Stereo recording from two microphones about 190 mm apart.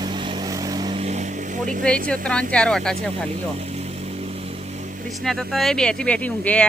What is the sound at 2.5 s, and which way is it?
Speech, 5° left (ahead or behind).